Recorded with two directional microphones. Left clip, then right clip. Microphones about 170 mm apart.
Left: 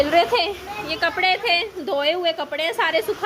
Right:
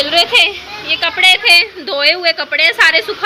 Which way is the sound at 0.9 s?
30° left (ahead or behind).